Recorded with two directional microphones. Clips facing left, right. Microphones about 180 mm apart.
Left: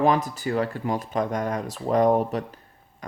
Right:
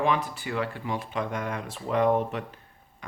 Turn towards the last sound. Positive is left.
turn(degrees=40)  # may be behind; listen again after turning